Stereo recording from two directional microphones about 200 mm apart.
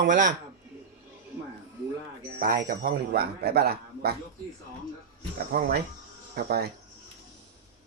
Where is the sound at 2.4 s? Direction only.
45° right (ahead or behind).